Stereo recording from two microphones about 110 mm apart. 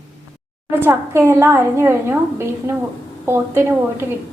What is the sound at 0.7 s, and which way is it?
A woman's voice, 20° right (ahead or behind).